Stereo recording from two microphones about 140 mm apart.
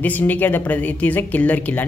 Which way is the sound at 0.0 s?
10° left (ahead or behind).